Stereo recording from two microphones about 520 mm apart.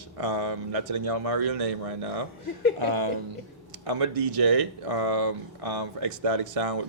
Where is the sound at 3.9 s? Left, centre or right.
Right.